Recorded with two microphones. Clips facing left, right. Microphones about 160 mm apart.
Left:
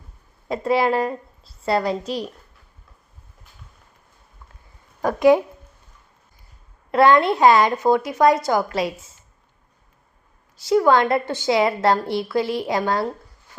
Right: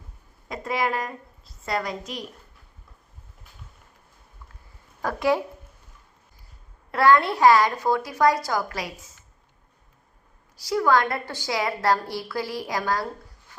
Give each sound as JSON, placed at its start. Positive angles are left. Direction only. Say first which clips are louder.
{"t": 0.4, "sound": "a woman's voice", "louder": "left 7 dB", "side_deg": 30}
{"t": 5.0, "sound": "a woman's voice", "louder": "left 8 dB", "side_deg": 20}
{"t": 6.9, "sound": "a woman's voice", "louder": "left 4 dB", "side_deg": 20}
{"t": 10.6, "sound": "a woman's voice", "louder": "left 5 dB", "side_deg": 25}